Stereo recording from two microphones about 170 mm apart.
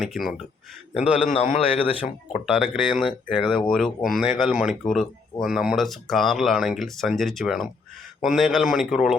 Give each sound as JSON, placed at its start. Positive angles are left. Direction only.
{"t": 0.0, "sound": "speech", "side_deg": 0}
{"t": 1.3, "sound": "a man's voice", "side_deg": 40}
{"t": 2.5, "sound": "speech", "side_deg": 0}